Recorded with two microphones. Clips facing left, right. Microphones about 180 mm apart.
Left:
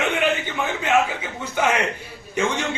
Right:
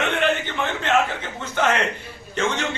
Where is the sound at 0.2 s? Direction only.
10° left (ahead or behind).